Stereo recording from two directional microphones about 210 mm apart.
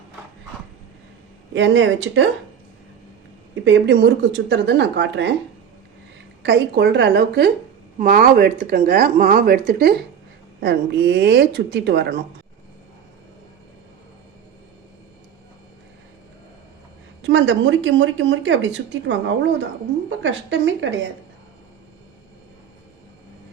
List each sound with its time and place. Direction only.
1.5 s speech: 60° right (ahead or behind)
3.6 s speech: 55° right (ahead or behind)
6.4 s speech: 55° right (ahead or behind)
17.2 s speech: 60° right (ahead or behind)